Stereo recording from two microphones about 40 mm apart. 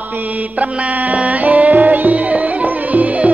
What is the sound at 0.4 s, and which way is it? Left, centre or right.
Music, right.